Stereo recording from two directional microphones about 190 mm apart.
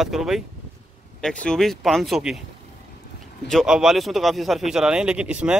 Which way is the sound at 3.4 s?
Centre (ahead or behind).